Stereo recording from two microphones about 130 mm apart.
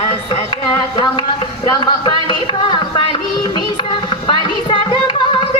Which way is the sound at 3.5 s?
40° left (ahead or behind).